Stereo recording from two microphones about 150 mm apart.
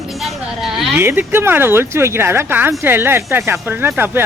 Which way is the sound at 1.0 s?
15° right (ahead or behind).